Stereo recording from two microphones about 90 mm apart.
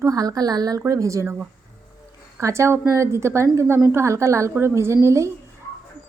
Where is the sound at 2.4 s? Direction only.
35° right (ahead or behind).